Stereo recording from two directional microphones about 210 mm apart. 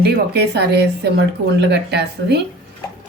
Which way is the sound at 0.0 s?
50° right (ahead or behind).